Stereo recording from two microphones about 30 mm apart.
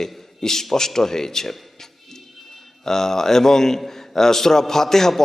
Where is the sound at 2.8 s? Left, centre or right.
Centre.